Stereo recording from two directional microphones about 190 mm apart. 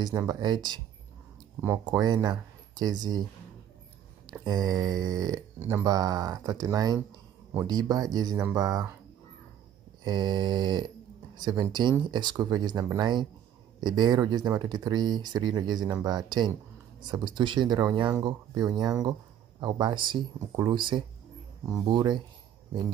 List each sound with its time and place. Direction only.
0.0 s speech: 20° right (ahead or behind)
4.3 s speech: 20° right (ahead or behind)
10.0 s speech: 20° right (ahead or behind)